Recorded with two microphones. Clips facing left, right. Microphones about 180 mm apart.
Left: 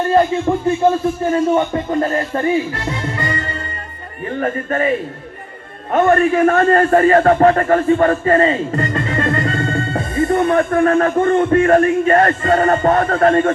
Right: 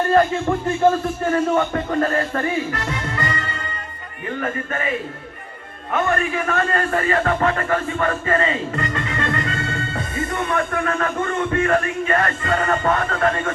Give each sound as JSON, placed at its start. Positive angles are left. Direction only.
{"t": 0.1, "sound": "speech", "side_deg": 15}
{"t": 1.3, "sound": "music", "side_deg": 20}
{"t": 4.3, "sound": "a man's voice", "side_deg": 35}